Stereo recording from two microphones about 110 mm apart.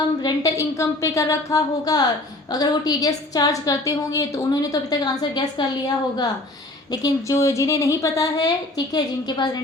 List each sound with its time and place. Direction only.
0.2 s a woman's voice: 35° left (ahead or behind)
6.9 s a woman's voice: 30° left (ahead or behind)